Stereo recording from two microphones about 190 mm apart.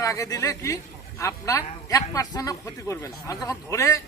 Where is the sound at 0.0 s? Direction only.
15° left (ahead or behind).